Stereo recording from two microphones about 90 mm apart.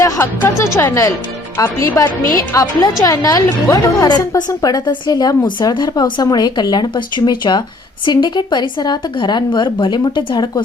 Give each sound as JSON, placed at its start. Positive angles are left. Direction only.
{"t": 0.0, "sound": "a woman's voice", "side_deg": 35}
{"t": 5.5, "sound": "speech", "side_deg": 55}